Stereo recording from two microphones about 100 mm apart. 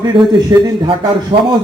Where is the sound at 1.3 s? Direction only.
65° right (ahead or behind).